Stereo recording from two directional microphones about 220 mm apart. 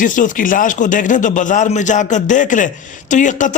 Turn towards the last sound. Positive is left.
turn(degrees=35)  # may be behind; listen again after turning